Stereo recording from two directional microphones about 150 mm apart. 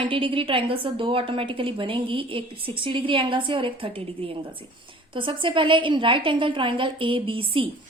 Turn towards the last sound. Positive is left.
turn(degrees=-35)  # may be behind; listen again after turning